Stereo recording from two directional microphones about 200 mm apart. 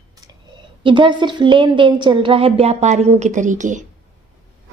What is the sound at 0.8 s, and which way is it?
A woman's voice, 25° right (ahead or behind).